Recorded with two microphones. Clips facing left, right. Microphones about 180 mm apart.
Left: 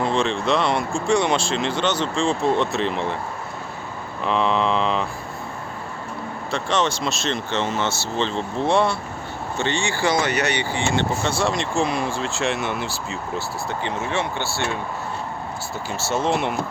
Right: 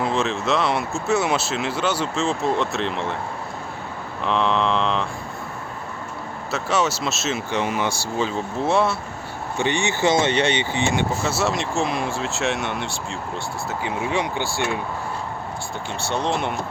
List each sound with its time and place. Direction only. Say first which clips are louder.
0.0 s speech: left 1 dB; 5° right (ahead or behind)
4.2 s mantra: even; centre (ahead or behind)
6.5 s speech: even; 5° right (ahead or behind)
9.6 s speech: right 2 dB; 15° right (ahead or behind)
11.2 s speech: even; 5° right (ahead or behind)
13.8 s speech: right 2 dB; 15° right (ahead or behind)
15.9 s speech: left 2 dB; 5° left (ahead or behind)